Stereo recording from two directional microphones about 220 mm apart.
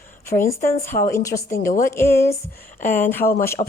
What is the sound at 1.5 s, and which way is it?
Speech, 35° left (ahead or behind).